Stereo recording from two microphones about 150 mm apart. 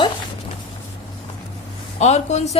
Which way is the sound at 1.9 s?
50° left (ahead or behind).